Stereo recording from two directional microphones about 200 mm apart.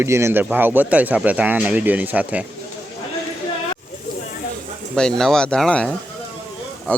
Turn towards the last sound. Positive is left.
turn(degrees=5)  # may be behind; listen again after turning